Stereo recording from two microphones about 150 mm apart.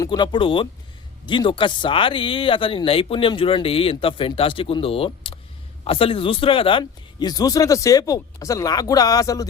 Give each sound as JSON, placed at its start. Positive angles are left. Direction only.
{"t": 0.0, "sound": "speech", "side_deg": 30}